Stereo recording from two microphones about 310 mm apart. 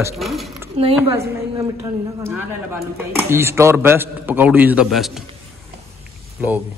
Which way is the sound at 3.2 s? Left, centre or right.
Centre.